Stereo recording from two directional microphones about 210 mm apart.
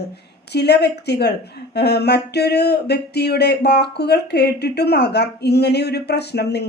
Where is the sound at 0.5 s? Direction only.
50° left (ahead or behind).